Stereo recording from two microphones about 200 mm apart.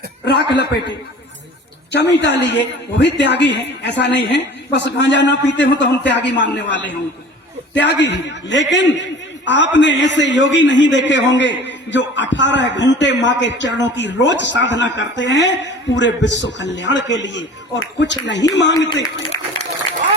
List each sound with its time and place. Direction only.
0.3 s a man's voice: 55° left (ahead or behind)